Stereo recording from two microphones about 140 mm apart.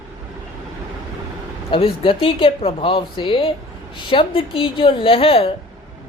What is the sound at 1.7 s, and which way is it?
Speech, 40° left (ahead or behind).